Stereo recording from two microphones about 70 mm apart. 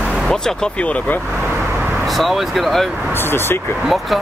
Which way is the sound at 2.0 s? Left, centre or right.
Centre.